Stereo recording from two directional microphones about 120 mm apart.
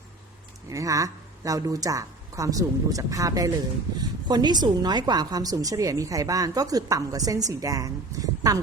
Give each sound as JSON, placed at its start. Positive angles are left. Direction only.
{"t": 0.7, "sound": "a woman's voice", "side_deg": -25}